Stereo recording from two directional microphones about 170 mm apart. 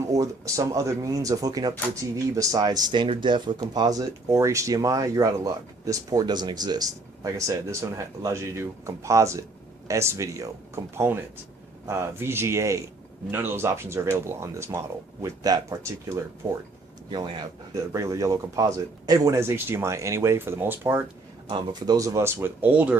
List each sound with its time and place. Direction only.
0.1 s speech: 20° right (ahead or behind)
21.4 s speech: 30° right (ahead or behind); by 23.0 s 10° right (ahead or behind)